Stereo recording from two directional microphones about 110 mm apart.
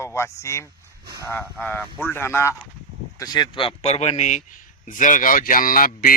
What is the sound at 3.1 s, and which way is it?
A man's voice, 40° left (ahead or behind).